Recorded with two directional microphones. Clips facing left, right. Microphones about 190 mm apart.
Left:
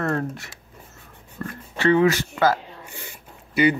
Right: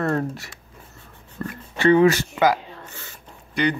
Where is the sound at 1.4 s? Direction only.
15° right (ahead or behind).